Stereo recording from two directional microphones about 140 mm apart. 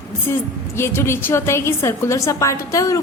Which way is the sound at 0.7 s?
20° left (ahead or behind).